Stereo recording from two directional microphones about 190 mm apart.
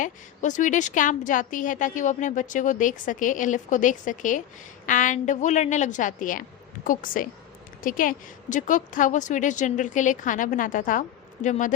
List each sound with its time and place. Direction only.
0.0 s a woman's voice: 40° left (ahead or behind)